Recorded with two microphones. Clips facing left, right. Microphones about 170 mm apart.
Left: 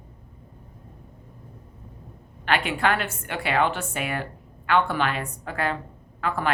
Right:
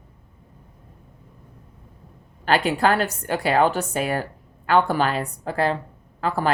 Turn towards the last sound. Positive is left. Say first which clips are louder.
# right 3 dB
turn(degrees=-35)  # may be behind; listen again after turning